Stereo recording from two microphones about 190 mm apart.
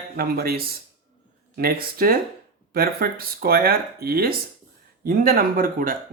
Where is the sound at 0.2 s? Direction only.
55° right (ahead or behind).